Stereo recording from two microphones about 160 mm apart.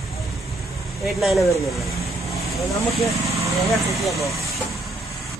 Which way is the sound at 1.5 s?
20° left (ahead or behind).